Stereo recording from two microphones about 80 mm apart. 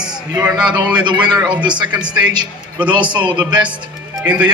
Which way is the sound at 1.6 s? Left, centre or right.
Right.